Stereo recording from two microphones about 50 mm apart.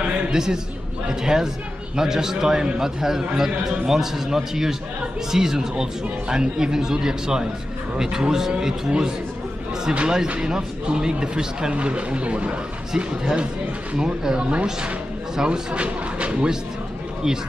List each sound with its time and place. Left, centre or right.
0.3 s a man's voice: centre